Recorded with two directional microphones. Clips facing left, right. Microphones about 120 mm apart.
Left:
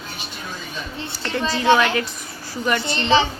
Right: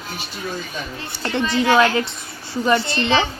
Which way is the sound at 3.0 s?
30° left (ahead or behind).